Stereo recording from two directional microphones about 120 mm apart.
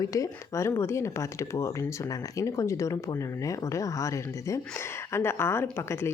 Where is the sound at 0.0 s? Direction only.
30° left (ahead or behind).